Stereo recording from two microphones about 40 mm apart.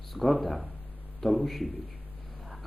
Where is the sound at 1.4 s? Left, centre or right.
Centre.